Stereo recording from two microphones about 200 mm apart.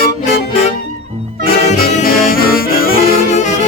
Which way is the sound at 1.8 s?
45° left (ahead or behind).